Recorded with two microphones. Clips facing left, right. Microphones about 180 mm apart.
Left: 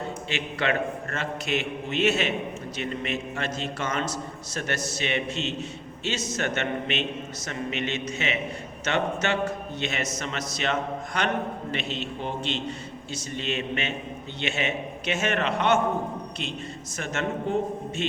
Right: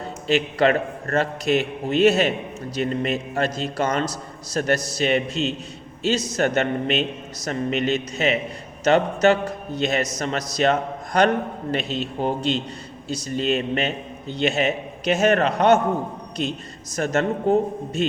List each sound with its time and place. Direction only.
0.0 s a man's voice: 35° right (ahead or behind)